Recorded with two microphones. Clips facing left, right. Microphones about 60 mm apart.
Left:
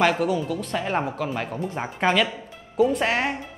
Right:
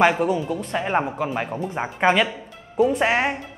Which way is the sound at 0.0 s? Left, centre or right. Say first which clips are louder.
Right 3 dB; centre.